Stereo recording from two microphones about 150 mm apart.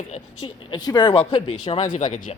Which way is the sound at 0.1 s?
35° left (ahead or behind).